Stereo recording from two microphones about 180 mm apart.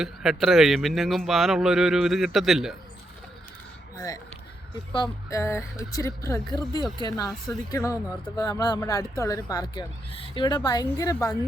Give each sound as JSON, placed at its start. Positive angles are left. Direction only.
{"t": 0.0, "sound": "speech", "side_deg": 0}
{"t": 3.9, "sound": "speech", "side_deg": 20}
{"t": 5.3, "sound": "speech", "side_deg": 15}